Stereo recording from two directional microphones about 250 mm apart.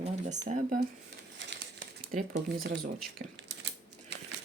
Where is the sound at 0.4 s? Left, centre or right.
Right.